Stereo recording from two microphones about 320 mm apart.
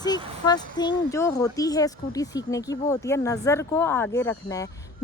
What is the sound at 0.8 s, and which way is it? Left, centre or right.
Speech, centre.